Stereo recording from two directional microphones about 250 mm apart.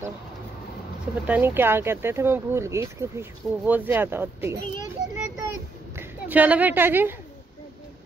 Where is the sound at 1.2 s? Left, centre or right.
Centre.